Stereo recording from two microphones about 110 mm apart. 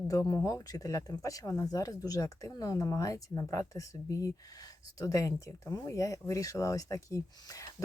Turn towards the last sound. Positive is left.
turn(degrees=30)  # may be behind; listen again after turning